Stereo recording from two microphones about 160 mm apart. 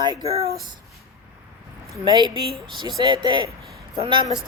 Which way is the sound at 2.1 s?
30° right (ahead or behind).